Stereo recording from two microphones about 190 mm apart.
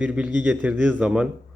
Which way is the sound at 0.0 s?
5° right (ahead or behind).